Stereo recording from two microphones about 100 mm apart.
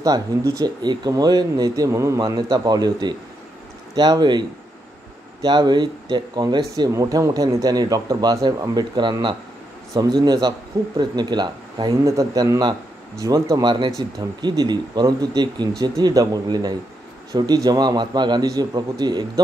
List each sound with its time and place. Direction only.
0.0 s speech: 35° right (ahead or behind)
1.9 s speech: 30° right (ahead or behind); by 6.6 s 45° right (ahead or behind)
6.9 s speech: 35° right (ahead or behind)